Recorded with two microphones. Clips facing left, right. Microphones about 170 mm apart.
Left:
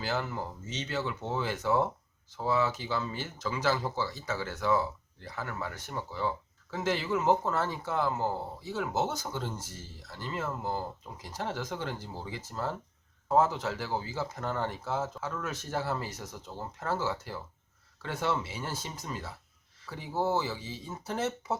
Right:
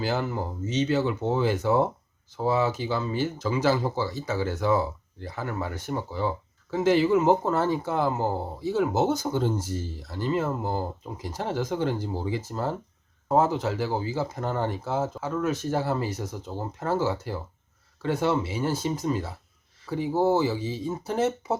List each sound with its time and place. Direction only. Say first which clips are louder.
0.0 s speech: right 6 dB; 15° right (ahead or behind)
16.1 s speech: right 8 dB; 25° right (ahead or behind)
16.9 s speech: right 6 dB; 15° right (ahead or behind)